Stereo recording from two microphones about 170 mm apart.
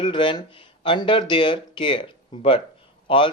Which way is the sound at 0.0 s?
30° left (ahead or behind).